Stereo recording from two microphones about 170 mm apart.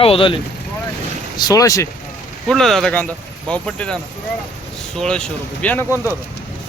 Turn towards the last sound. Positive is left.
turn(degrees=10)  # may be behind; listen again after turning